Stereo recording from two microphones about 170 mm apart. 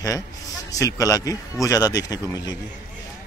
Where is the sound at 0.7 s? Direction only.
20° left (ahead or behind).